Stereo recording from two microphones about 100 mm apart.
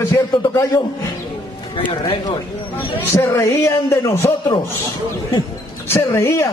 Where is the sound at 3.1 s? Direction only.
35° left (ahead or behind).